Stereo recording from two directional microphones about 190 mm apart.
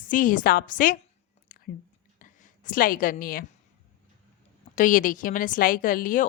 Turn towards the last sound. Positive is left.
turn(degrees=45)  # may be behind; listen again after turning